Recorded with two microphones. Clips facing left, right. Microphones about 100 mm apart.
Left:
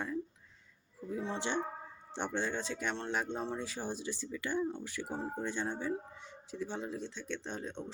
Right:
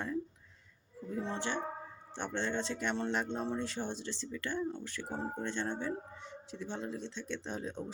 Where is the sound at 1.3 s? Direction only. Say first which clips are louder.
Left 1 dB; 15° left (ahead or behind).